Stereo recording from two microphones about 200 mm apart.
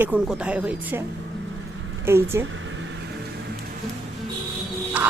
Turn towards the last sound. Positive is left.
turn(degrees=-5)  # may be behind; listen again after turning